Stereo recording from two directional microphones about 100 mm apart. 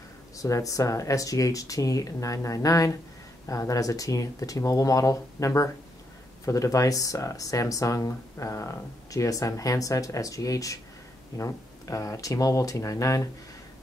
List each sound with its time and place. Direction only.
0.4 s speech: 35° left (ahead or behind)